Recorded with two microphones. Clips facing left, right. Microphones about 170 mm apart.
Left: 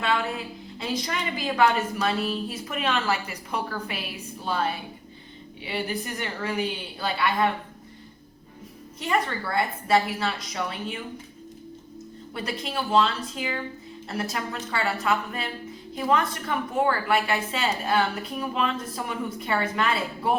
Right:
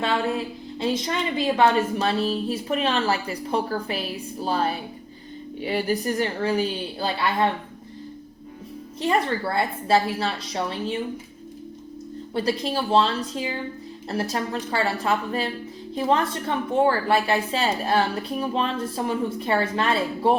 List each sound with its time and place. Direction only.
0.0 s a woman's voice: 30° right (ahead or behind)
9.0 s a woman's voice: 30° right (ahead or behind)
12.3 s a woman's voice: 30° right (ahead or behind)